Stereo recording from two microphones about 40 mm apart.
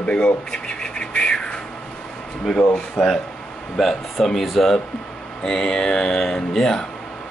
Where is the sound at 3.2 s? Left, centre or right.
Left.